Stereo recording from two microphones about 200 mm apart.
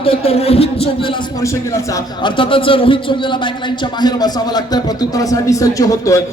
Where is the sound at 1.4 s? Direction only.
15° left (ahead or behind).